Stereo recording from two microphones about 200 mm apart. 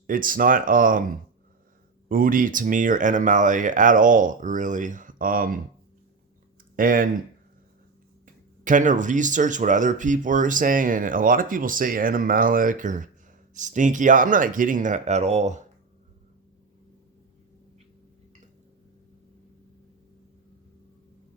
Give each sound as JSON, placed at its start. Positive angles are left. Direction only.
{"t": 0.1, "sound": "speech", "side_deg": -45}
{"t": 2.0, "sound": "speech", "side_deg": -45}
{"t": 6.7, "sound": "speech", "side_deg": -45}
{"t": 8.6, "sound": "speech", "side_deg": -40}